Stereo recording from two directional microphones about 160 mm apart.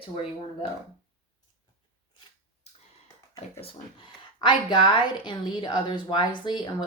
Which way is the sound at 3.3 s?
35° left (ahead or behind).